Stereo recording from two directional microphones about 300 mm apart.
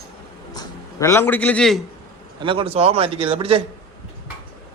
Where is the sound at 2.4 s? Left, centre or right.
Centre.